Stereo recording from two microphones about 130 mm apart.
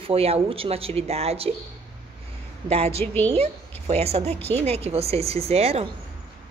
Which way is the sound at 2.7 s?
50° right (ahead or behind).